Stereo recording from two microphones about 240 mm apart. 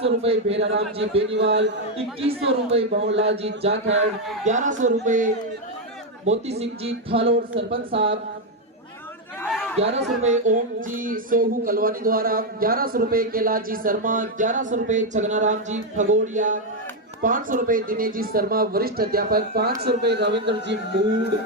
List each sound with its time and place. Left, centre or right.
0.0 s speech: right
1.3 s speech: right
2.2 s speech: right
2.9 s speech: right
3.6 s speech: right
9.4 s chatter: centre
9.7 s speech: right